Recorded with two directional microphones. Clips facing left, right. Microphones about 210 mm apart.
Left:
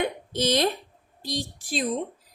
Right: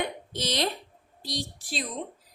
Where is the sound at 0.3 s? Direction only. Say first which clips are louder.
Left 6 dB; 50° left (ahead or behind).